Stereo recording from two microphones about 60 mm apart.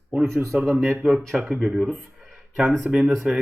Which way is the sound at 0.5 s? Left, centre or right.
Centre.